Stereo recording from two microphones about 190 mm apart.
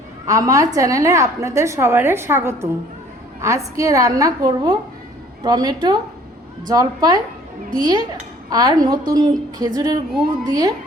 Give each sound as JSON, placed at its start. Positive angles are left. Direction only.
{"t": 0.3, "sound": "a woman's voice", "side_deg": -15}